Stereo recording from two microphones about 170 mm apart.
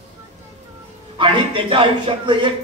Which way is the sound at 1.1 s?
30° right (ahead or behind).